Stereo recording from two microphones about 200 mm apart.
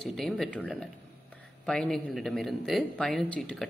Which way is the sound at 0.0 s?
Centre (ahead or behind).